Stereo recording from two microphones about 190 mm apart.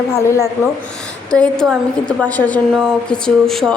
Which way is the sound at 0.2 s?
15° left (ahead or behind).